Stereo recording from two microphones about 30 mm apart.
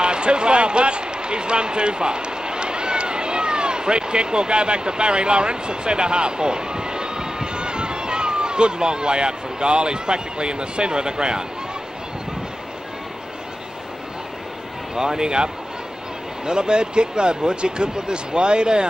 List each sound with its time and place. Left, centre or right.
0.0 s speech: right
15.0 s speech: right